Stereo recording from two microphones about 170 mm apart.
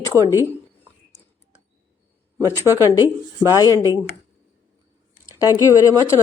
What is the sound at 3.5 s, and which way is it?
Speech, 20° left (ahead or behind).